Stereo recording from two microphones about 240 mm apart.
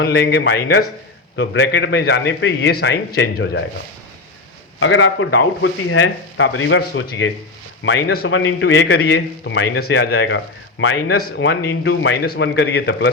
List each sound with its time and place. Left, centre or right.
0.0 s a man's voice: left
4.8 s a man's voice: left